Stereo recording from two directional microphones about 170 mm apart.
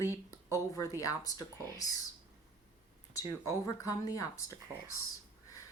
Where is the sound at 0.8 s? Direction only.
20° left (ahead or behind).